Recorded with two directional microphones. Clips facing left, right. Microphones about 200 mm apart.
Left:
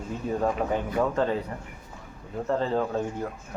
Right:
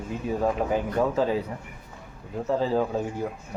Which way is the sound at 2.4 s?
5° right (ahead or behind).